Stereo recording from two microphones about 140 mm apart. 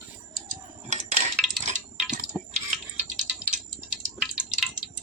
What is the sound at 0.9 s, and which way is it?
Dishes, 60° right (ahead or behind).